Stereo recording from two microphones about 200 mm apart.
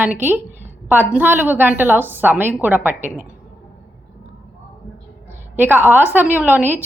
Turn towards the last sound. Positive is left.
turn(degrees=-10)  # may be behind; listen again after turning